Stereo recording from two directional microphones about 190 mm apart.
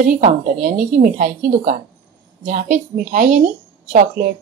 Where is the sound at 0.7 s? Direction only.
45° right (ahead or behind).